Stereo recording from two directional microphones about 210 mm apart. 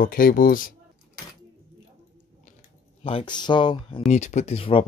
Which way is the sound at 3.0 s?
25° left (ahead or behind).